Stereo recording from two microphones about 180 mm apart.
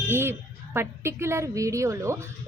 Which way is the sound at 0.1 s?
15° right (ahead or behind).